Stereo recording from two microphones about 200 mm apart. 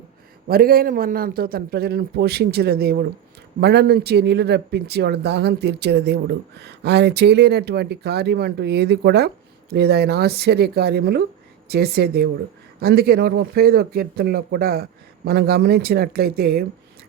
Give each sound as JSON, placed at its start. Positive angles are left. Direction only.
{"t": 0.4, "sound": "speech", "side_deg": -50}